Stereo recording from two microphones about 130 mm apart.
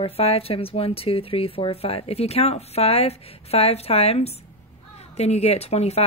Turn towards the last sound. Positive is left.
turn(degrees=55)  # may be behind; listen again after turning